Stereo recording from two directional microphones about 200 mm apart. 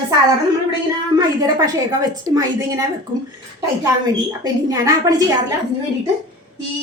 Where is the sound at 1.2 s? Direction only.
20° right (ahead or behind).